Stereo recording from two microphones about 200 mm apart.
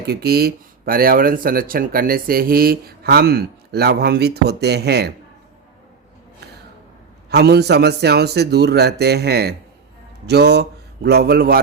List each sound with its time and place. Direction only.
0.0 s speech: 50° right (ahead or behind)
7.3 s a man's voice: 55° right (ahead or behind)